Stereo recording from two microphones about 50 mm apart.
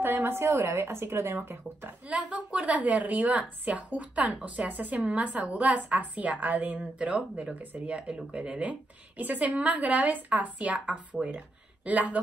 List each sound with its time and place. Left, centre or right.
0.0 s speech: right
2.0 s a woman's voice: right